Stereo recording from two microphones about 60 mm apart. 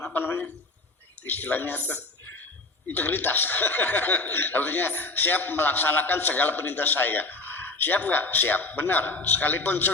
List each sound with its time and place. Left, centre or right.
0.1 s speech: left